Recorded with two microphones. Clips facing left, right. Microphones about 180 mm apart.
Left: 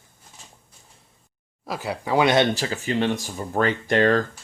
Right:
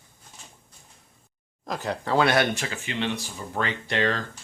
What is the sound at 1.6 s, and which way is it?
Speech, 10° left (ahead or behind).